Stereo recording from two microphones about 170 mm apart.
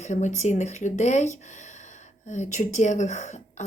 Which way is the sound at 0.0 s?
45° left (ahead or behind).